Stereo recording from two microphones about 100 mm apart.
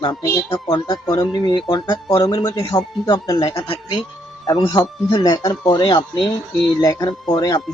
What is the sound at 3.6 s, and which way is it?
Speech, 65° left (ahead or behind).